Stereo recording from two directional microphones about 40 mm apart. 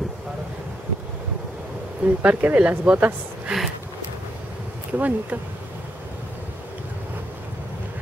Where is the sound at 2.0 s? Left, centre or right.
Right.